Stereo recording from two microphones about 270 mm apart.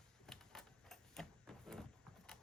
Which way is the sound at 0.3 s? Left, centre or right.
Centre.